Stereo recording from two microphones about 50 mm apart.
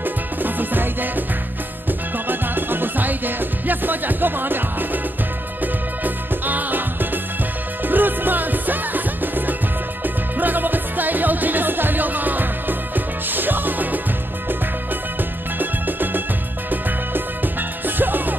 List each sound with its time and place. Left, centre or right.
0.0 s music: right
15.6 s music: right